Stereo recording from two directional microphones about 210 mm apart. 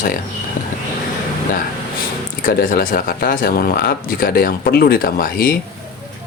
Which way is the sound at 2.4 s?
40° left (ahead or behind).